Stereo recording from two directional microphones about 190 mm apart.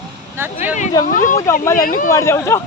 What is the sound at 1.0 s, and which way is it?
Speech, 45° left (ahead or behind).